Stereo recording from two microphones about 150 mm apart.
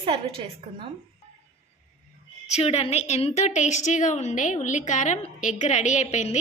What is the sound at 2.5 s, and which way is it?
A woman's voice, 45° left (ahead or behind).